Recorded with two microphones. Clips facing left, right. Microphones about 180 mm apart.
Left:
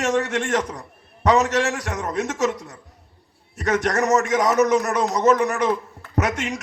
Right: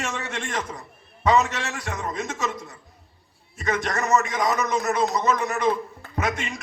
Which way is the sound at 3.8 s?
40° left (ahead or behind).